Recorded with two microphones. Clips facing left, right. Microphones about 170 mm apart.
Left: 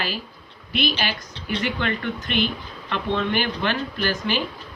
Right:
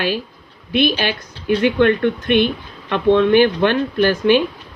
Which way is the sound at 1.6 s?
60° right (ahead or behind).